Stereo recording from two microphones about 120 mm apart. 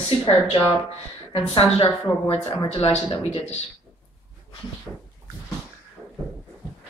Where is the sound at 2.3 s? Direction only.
45° left (ahead or behind).